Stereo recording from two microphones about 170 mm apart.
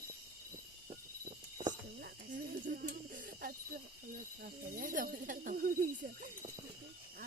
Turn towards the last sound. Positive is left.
turn(degrees=-55)  # may be behind; listen again after turning